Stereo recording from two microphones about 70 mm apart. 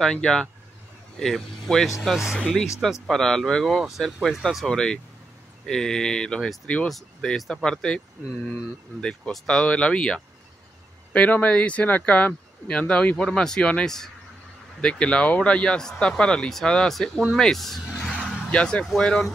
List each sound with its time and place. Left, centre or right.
0.0 s speech: centre
2.9 s speech: centre
4.6 s speech: centre
9.3 s speech: centre
18.5 s speech: centre